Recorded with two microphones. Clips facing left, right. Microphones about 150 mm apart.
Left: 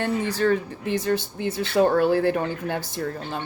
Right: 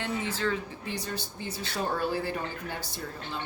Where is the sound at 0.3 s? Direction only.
50° left (ahead or behind).